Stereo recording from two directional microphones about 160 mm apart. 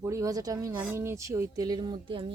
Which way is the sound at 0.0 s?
20° right (ahead or behind).